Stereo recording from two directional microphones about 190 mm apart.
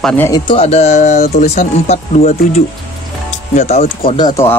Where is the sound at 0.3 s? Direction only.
30° left (ahead or behind).